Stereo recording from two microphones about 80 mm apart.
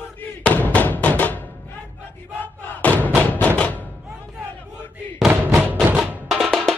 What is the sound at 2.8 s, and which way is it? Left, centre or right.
Music, centre.